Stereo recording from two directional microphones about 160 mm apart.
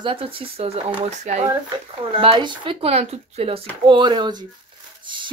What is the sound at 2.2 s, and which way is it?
Speech, 35° right (ahead or behind).